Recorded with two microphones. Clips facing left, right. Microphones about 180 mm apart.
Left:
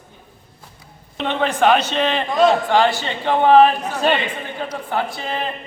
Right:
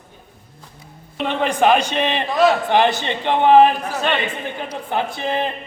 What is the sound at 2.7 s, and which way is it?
A man's voice, 20° right (ahead or behind).